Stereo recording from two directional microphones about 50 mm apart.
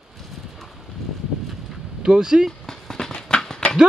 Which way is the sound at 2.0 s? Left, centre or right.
Centre.